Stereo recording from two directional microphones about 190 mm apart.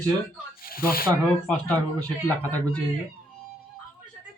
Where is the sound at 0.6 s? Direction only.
50° left (ahead or behind).